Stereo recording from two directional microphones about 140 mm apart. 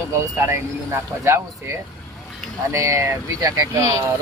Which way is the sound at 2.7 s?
20° right (ahead or behind).